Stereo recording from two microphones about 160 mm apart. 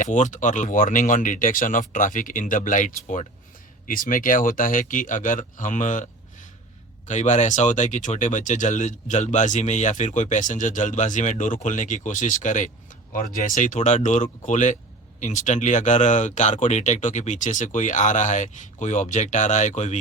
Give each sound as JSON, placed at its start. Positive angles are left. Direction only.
{"t": 0.0, "sound": "speech", "side_deg": 50}
{"t": 7.1, "sound": "speech", "side_deg": 50}